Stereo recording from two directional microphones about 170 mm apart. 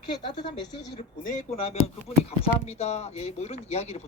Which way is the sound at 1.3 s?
45° left (ahead or behind).